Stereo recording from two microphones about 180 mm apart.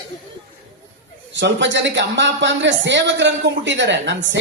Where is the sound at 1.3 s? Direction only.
90° right.